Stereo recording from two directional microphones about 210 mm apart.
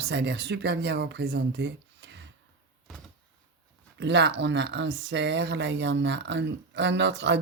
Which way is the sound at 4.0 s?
55° right (ahead or behind).